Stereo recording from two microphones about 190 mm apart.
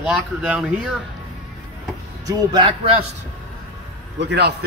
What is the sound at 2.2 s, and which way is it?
Speech, 25° right (ahead or behind).